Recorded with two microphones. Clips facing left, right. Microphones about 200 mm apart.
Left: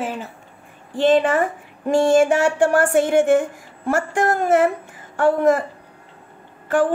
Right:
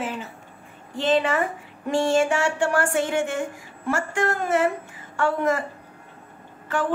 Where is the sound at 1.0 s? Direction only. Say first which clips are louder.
Left 5 dB; 50° left (ahead or behind).